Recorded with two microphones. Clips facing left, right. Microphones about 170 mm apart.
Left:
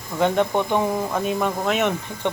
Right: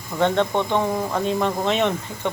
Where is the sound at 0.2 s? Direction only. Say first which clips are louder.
Even; 10° left (ahead or behind).